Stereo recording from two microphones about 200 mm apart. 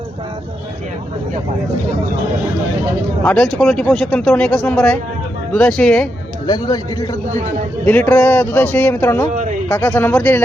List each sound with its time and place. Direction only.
3.2 s speech: 5° left (ahead or behind)
6.5 s speech: 20° left (ahead or behind)
7.9 s speech: 10° left (ahead or behind)
9.3 s speech: 40° right (ahead or behind)
9.6 s speech: 10° left (ahead or behind)